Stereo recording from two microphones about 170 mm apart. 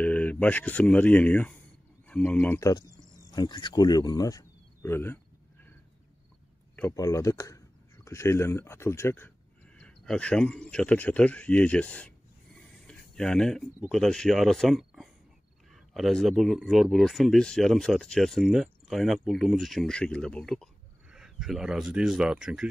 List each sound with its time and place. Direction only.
0.0 s speech: 10° left (ahead or behind)
3.3 s speech: 25° left (ahead or behind)
6.8 s speech: 15° left (ahead or behind)
12.5 s a sound: 5° left (ahead or behind)
13.8 s speech: centre (ahead or behind)